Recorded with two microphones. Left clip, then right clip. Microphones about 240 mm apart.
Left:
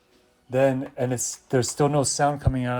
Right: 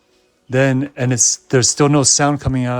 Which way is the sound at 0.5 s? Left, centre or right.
Right.